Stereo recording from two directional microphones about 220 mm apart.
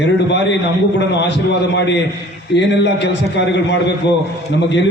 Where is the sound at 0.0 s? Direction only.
50° left (ahead or behind).